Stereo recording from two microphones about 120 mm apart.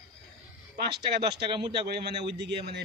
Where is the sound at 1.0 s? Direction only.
40° right (ahead or behind).